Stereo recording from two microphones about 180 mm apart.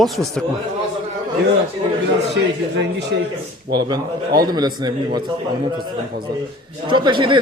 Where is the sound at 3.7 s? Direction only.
25° right (ahead or behind).